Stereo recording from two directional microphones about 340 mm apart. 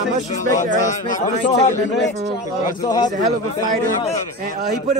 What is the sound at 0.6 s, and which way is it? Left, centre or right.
Speech, left.